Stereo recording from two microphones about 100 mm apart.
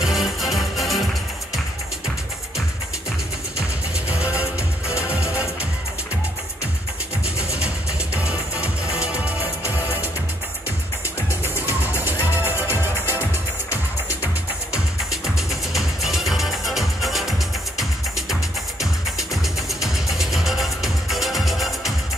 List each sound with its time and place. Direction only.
0.0 s music: 5° right (ahead or behind)
4.2 s music: 15° right (ahead or behind)
7.5 s music: 10° right (ahead or behind)
12.0 s music: 20° right (ahead or behind)
14.2 s music: 5° right (ahead or behind)
18.8 s music: 5° right (ahead or behind)